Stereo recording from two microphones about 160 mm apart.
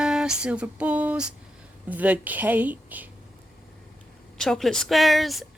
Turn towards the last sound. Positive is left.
turn(degrees=0)  # may be behind; listen again after turning